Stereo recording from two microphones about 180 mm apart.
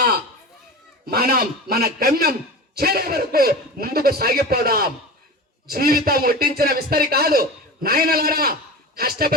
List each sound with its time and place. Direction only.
1.0 s a man's voice: 55° right (ahead or behind)